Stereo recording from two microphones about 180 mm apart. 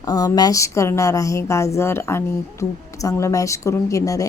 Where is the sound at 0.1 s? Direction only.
20° left (ahead or behind).